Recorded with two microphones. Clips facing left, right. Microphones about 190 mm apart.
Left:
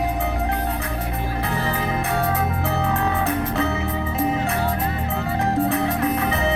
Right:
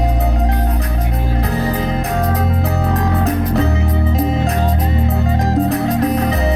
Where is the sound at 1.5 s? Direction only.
40° right (ahead or behind).